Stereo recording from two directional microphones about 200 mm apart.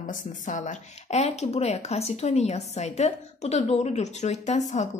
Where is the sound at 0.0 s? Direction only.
40° left (ahead or behind).